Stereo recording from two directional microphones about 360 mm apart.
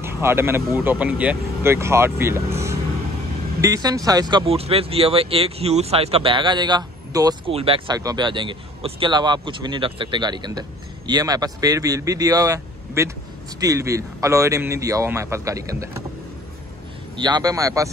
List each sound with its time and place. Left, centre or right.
0.0 s speech: centre
17.2 s speech: centre